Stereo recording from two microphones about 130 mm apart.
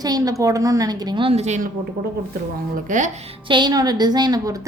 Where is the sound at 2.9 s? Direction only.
85° right.